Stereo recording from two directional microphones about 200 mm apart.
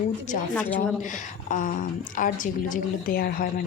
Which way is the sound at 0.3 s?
40° left (ahead or behind).